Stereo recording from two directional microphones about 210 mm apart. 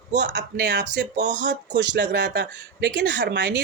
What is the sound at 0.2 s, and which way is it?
Speech, 55° right (ahead or behind).